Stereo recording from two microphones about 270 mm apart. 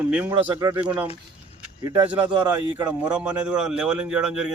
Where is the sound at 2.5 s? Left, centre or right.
Centre.